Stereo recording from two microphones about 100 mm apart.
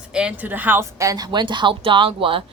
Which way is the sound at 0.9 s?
35° right (ahead or behind).